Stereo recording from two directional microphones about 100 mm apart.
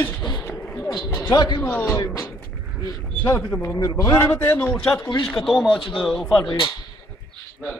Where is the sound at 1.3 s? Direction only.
50° left (ahead or behind).